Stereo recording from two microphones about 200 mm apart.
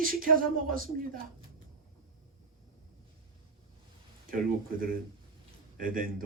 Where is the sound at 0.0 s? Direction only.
45° right (ahead or behind).